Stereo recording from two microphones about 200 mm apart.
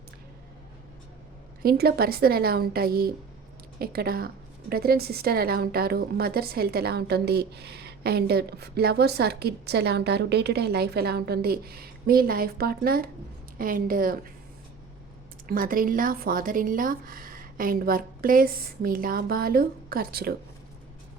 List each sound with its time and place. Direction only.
1.6 s a woman's voice: 50° right (ahead or behind)
15.4 s a woman's voice: 45° right (ahead or behind)